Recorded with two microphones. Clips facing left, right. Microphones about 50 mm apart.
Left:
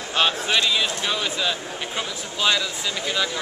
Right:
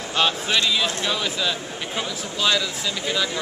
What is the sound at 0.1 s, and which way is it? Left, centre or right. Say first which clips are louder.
Speech: even; centre.